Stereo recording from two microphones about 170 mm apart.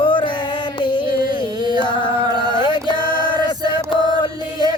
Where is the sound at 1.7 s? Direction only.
30° left (ahead or behind).